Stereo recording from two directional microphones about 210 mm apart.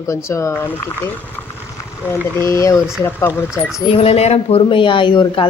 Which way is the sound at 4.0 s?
30° left (ahead or behind).